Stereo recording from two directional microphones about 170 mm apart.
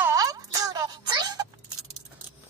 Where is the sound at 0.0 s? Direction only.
20° right (ahead or behind).